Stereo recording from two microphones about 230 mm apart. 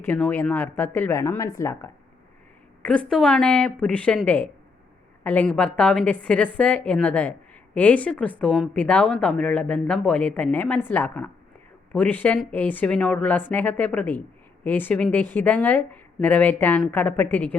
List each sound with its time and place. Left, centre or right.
0.0 s a woman's voice: centre